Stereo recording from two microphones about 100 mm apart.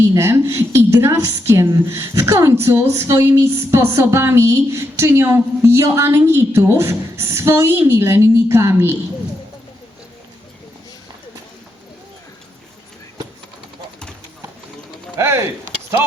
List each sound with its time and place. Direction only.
0.1 s a woman's voice: 25° right (ahead or behind)
15.2 s a woman's voice: 30° right (ahead or behind)